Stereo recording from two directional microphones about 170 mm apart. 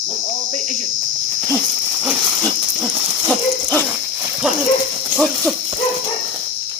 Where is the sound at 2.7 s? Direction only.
20° right (ahead or behind).